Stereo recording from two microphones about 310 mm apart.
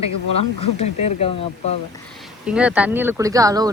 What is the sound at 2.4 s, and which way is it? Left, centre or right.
Speech, centre.